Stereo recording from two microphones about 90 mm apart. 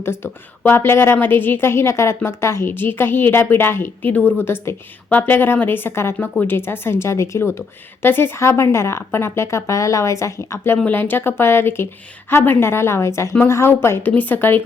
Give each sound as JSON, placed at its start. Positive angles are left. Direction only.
{"t": 0.0, "sound": "a woman's voice", "side_deg": 25}